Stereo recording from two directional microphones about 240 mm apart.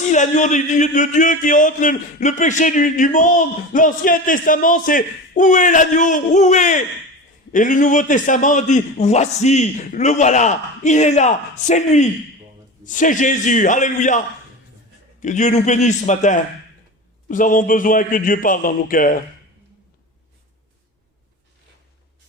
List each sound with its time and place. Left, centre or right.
0.1 s a man's voice: left
15.2 s a man's voice: left